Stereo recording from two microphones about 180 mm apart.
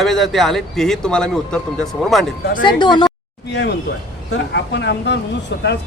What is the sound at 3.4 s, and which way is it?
Speech, 75° left (ahead or behind).